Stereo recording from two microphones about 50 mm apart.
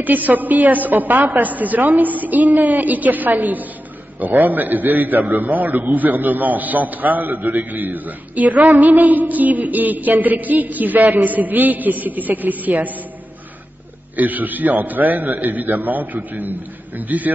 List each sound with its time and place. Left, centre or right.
0.0 s a man's voice: right
14.1 s a man's voice: right